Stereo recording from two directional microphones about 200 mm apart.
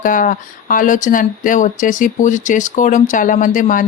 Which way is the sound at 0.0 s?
40° left (ahead or behind).